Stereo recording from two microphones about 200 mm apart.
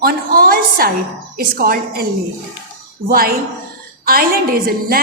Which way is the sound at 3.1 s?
45° right (ahead or behind).